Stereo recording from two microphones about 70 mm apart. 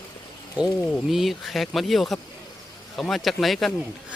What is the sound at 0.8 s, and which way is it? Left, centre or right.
Speech, centre.